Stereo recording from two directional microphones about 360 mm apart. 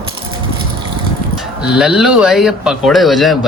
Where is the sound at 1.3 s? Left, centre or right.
Centre.